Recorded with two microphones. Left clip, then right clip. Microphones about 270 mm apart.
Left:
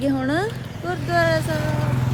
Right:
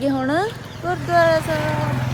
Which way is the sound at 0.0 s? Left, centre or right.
Centre.